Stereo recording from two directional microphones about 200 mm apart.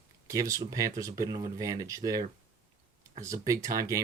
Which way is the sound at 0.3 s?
15° right (ahead or behind).